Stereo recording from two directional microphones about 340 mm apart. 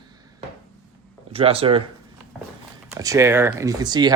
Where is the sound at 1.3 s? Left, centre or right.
Centre.